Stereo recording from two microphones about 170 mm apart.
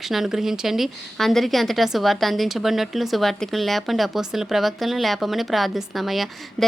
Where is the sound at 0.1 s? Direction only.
Centre (ahead or behind).